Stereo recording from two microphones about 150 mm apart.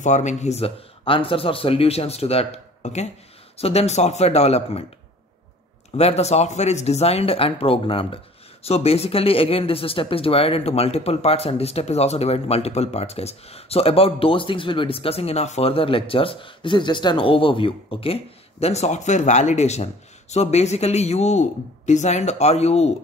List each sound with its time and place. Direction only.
0.0 s speech: 50° left (ahead or behind)
5.9 s speech: 45° left (ahead or behind)